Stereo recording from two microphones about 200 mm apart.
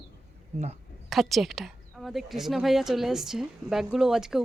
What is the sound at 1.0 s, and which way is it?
Speech, centre (ahead or behind).